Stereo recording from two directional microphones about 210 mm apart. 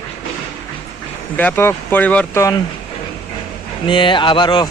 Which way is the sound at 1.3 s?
10° left (ahead or behind).